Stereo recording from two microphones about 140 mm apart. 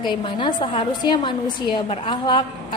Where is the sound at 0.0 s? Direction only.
35° left (ahead or behind).